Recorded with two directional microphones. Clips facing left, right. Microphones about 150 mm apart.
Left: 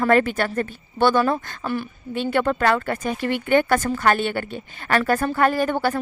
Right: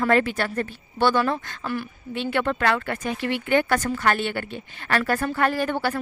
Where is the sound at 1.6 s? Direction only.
25° left (ahead or behind).